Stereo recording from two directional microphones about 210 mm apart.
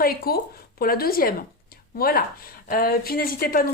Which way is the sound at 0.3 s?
45° left (ahead or behind).